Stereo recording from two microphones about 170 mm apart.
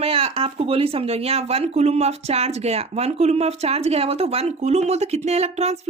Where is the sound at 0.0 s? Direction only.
35° right (ahead or behind).